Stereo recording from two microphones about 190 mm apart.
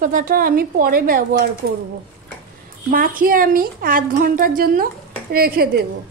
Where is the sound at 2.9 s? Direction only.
45° right (ahead or behind).